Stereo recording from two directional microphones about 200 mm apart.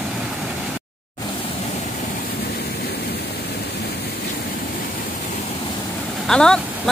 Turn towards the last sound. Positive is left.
turn(degrees=5)  # may be behind; listen again after turning